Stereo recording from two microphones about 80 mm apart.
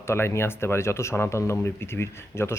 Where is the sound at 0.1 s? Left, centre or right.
Left.